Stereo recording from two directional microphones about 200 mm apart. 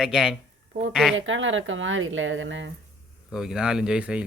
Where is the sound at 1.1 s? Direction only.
70° right (ahead or behind).